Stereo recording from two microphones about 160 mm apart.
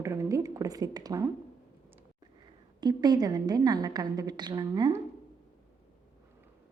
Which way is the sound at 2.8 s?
25° right (ahead or behind).